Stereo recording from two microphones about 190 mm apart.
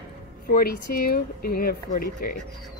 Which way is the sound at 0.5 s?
50° left (ahead or behind).